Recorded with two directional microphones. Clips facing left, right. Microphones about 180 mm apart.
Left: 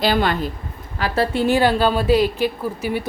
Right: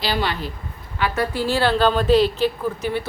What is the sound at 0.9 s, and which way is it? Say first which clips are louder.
A woman's voice: left 3 dB; 35° left (ahead or behind).